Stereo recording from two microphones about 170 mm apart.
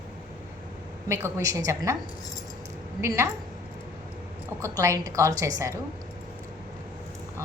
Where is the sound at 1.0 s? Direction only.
15° right (ahead or behind).